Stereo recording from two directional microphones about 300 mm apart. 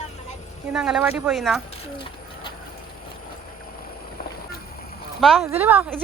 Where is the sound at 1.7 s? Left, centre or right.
Centre.